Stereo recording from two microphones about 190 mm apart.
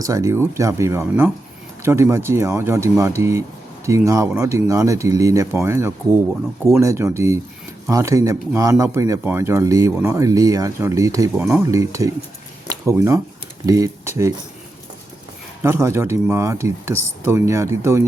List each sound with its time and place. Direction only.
0.0 s speech: 15° right (ahead or behind)
12.6 s a sound: 15° right (ahead or behind)
13.7 s speech: 15° right (ahead or behind)
15.6 s speech: 15° right (ahead or behind)